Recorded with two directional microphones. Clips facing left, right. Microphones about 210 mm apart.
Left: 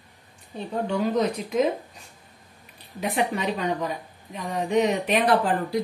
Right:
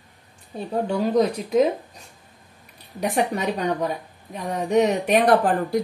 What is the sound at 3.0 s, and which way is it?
A woman's voice, 45° right (ahead or behind).